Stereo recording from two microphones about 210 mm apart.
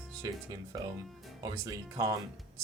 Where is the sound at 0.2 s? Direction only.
15° right (ahead or behind).